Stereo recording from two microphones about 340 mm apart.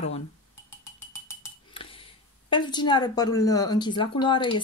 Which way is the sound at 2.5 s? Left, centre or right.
Centre.